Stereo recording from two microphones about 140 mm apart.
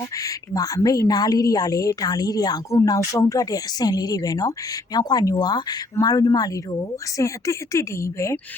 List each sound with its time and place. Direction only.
0.2 s a woman's voice: 25° left (ahead or behind)